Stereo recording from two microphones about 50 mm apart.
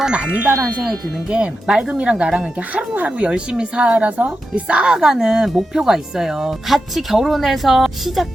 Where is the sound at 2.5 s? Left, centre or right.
Right.